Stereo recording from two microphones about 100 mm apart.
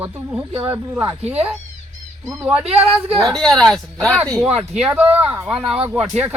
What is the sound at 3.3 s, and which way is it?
Speech, 5° left (ahead or behind).